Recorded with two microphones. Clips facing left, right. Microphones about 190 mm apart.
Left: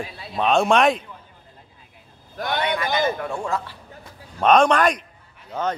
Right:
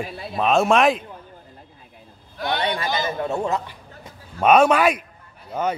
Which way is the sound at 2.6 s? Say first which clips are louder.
Left 1 dB; 30° right (ahead or behind).